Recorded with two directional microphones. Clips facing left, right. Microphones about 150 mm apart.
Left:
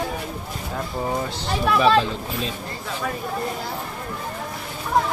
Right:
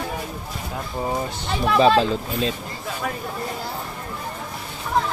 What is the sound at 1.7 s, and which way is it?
Speech, 30° right (ahead or behind).